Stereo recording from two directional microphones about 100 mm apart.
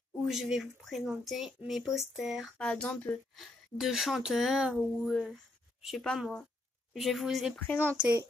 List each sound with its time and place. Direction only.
0.3 s speech: 5° right (ahead or behind)
2.5 s speech: 10° left (ahead or behind)
3.3 s speech: centre (ahead or behind)
5.3 s a sound: centre (ahead or behind)
6.9 s speech: centre (ahead or behind)
7.5 s speech: 15° left (ahead or behind)